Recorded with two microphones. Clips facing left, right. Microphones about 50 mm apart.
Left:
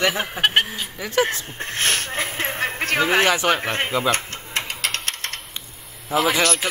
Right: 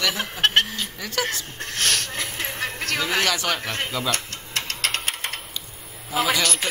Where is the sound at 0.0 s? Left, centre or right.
Left.